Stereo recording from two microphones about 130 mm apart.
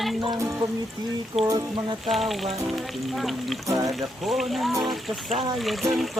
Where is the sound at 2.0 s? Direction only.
Centre (ahead or behind).